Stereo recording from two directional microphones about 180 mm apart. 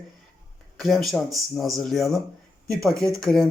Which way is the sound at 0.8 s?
Centre (ahead or behind).